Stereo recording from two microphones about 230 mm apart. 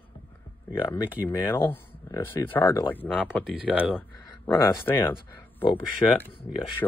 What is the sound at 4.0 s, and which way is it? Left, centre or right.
Speech, centre.